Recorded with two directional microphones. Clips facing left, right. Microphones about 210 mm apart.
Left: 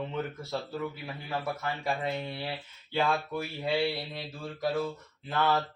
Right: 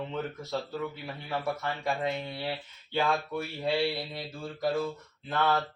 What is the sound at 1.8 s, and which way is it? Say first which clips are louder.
Speech: even; centre (ahead or behind).